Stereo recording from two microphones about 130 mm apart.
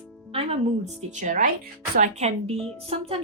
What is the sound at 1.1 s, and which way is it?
Speech, 80° right.